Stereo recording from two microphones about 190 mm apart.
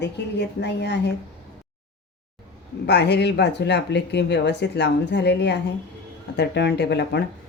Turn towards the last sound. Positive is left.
turn(degrees=60)  # may be behind; listen again after turning